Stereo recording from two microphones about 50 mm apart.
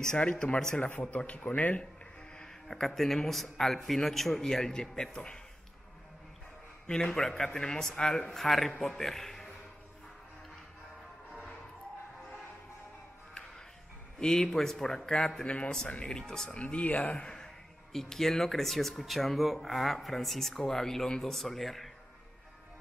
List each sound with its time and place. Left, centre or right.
0.0 s speech: centre
0.7 s speech: left
2.3 s speech: centre
6.9 s a man's voice: centre
14.2 s speech: centre
17.9 s speech: centre